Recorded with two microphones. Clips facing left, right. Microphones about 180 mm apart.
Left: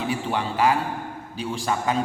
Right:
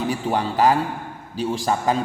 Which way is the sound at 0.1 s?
40° right (ahead or behind).